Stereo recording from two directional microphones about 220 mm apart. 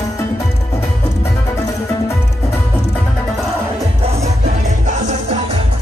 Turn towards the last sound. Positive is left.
turn(degrees=-30)  # may be behind; listen again after turning